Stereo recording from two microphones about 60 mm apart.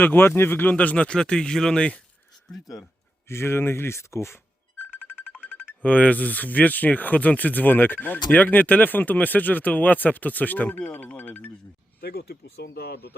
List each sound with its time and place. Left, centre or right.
0.0 s speech: left; by 2.0 s centre
3.2 s speech: left
5.0 s music: centre
5.5 s a sound: centre
5.8 s speech: left